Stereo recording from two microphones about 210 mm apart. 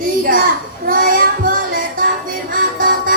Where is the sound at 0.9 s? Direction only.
40° right (ahead or behind).